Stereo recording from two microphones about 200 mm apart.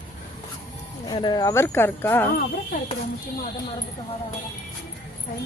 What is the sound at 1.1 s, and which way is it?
Speech, 20° left (ahead or behind).